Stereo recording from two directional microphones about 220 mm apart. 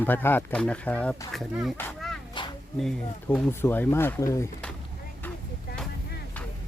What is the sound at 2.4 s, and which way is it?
Music, 20° left (ahead or behind).